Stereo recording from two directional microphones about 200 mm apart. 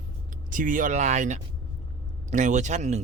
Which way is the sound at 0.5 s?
40° right (ahead or behind).